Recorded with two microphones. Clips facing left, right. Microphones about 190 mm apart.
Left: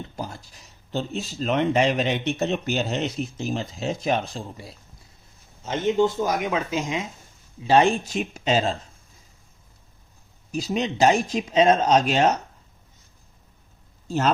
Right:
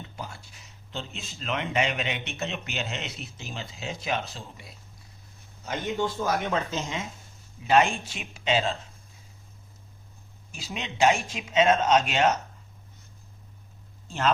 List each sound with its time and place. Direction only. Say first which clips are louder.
0.2 s speech: left 5 dB; 40° left (ahead or behind)
5.6 s speech: left 8 dB; 25° left (ahead or behind)
7.6 s speech: left 4 dB; 30° left (ahead or behind)
10.5 s speech: left 12 dB; 40° left (ahead or behind)
14.1 s speech: left 3 dB; 40° left (ahead or behind)